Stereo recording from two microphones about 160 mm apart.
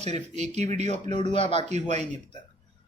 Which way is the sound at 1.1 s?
35° left (ahead or behind).